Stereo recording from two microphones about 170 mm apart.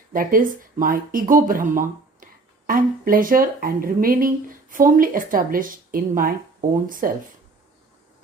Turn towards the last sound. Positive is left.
turn(degrees=-55)  # may be behind; listen again after turning